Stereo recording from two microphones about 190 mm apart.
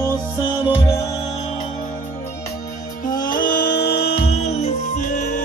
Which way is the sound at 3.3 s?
50° left (ahead or behind).